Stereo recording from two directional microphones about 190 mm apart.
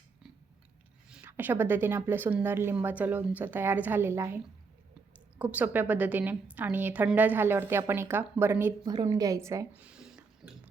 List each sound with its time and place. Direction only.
1.1 s a woman's voice: 10° right (ahead or behind)
5.4 s a woman's voice: 10° right (ahead or behind)
8.8 s speech: 20° right (ahead or behind); by 10.6 s 5° right (ahead or behind)